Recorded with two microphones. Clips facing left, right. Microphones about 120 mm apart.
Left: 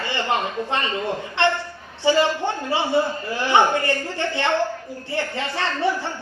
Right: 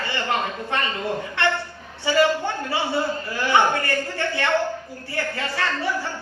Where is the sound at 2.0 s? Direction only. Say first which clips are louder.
Left 1 dB; 25° left (ahead or behind).